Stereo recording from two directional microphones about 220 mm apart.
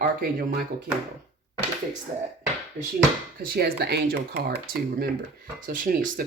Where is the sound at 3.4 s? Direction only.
45° right (ahead or behind).